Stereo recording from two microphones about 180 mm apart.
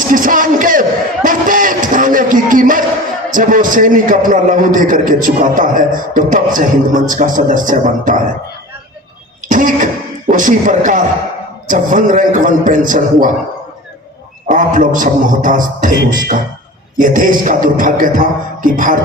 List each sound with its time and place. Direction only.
0.1 s a sound: 50° right (ahead or behind)
3.3 s a man's voice: 45° right (ahead or behind)
9.5 s cough: 45° right (ahead or behind)
11.7 s a man's voice: 45° right (ahead or behind)
14.4 s a man's voice: 45° right (ahead or behind)